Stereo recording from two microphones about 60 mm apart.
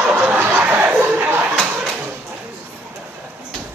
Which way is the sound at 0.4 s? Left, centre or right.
Right.